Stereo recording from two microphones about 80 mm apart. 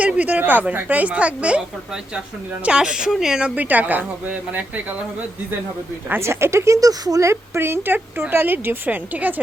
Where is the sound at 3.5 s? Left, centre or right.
Right.